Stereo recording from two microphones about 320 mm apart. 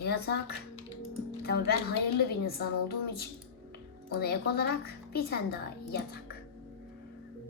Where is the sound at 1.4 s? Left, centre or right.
Left.